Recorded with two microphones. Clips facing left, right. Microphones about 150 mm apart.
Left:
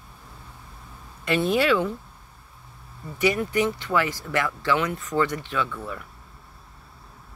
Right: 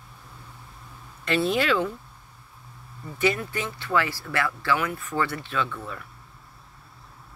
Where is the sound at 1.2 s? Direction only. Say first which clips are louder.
Left 2 dB; 15° left (ahead or behind).